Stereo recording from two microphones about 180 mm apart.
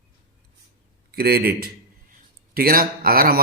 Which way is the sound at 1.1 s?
60° right (ahead or behind).